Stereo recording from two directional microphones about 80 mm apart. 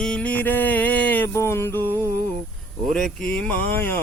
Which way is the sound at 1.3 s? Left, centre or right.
Left.